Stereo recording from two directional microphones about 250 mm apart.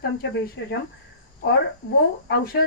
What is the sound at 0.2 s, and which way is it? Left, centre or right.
Speech, left.